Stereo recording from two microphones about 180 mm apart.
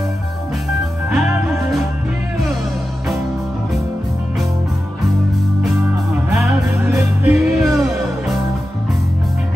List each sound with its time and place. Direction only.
1.1 s music: centre (ahead or behind)
6.3 s music: centre (ahead or behind)